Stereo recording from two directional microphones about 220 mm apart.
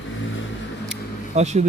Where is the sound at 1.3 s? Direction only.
30° right (ahead or behind).